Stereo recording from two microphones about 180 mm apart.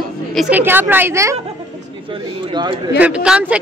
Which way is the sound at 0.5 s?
10° right (ahead or behind).